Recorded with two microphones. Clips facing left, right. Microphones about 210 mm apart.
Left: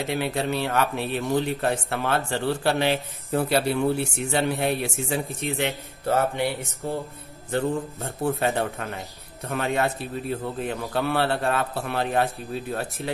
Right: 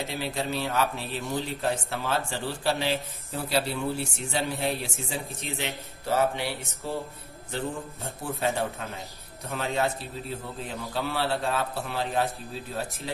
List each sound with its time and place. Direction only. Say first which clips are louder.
0.0 s speech: left 5 dB; 60° left (ahead or behind)